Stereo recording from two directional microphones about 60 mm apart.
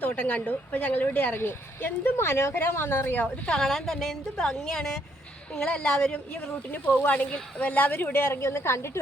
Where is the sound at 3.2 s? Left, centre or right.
Centre.